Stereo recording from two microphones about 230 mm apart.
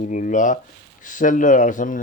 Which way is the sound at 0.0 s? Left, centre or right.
Left.